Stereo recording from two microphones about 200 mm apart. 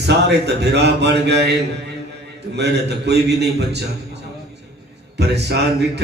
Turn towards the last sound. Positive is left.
turn(degrees=-55)  # may be behind; listen again after turning